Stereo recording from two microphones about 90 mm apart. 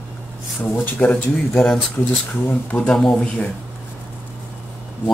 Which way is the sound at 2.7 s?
15° left (ahead or behind).